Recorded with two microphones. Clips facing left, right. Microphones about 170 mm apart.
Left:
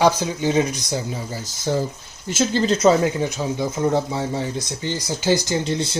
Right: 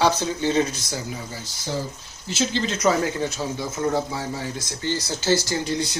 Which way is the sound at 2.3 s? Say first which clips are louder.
Left 4 dB; 50° left (ahead or behind).